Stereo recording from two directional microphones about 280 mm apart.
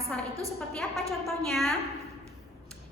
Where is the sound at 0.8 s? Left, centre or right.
Centre.